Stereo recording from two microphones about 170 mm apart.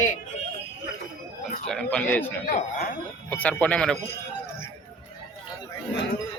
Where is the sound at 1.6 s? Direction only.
5° left (ahead or behind).